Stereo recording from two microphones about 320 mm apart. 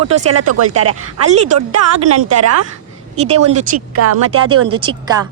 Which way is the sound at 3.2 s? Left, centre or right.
Centre.